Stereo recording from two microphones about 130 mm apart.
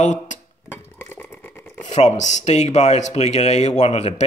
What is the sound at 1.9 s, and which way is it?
Speech, 65° left (ahead or behind).